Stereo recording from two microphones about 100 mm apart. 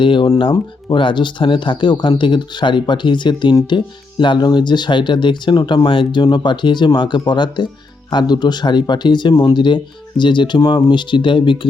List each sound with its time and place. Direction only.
0.0 s speech: 55° left (ahead or behind)